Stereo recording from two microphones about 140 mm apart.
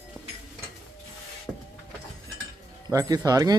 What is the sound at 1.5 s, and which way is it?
Power windows, 5° right (ahead or behind).